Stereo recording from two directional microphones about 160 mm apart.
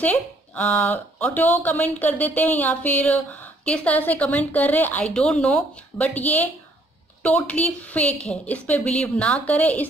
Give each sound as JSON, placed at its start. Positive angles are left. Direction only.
{"t": 0.0, "sound": "speech", "side_deg": 10}